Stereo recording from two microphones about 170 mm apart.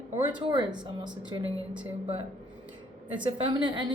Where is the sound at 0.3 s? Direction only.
25° right (ahead or behind).